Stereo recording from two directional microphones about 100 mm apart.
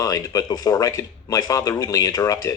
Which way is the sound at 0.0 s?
35° left (ahead or behind).